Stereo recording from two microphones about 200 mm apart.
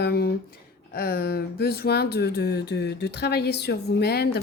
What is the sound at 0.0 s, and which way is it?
Speech, 50° left (ahead or behind).